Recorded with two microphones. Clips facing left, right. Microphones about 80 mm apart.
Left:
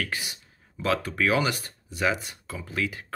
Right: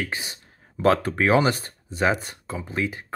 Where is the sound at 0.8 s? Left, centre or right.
Right.